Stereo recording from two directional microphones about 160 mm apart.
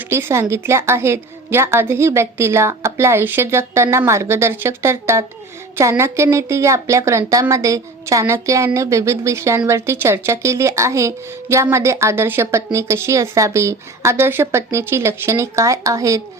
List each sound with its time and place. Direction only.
0.1 s a woman's voice: 15° right (ahead or behind)